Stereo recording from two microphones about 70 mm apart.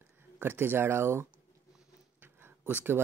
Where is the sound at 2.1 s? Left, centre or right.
Right.